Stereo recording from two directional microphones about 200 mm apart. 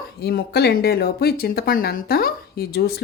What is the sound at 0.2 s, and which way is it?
Speech, 55° left (ahead or behind).